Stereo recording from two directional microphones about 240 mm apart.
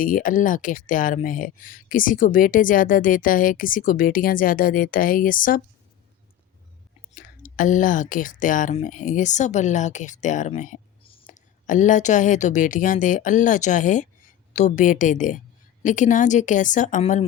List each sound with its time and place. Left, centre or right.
0.0 s speech: left
7.2 s speech: left